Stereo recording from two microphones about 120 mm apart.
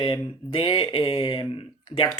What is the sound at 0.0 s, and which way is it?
Speech, 45° left (ahead or behind).